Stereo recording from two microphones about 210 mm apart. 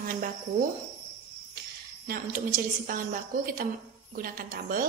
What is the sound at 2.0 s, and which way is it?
A woman's voice, 40° right (ahead or behind).